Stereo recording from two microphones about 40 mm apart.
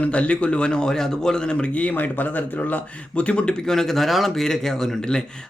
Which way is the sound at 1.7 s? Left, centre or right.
Left.